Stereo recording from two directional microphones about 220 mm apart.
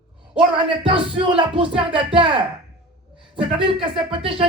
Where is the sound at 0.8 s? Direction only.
25° right (ahead or behind).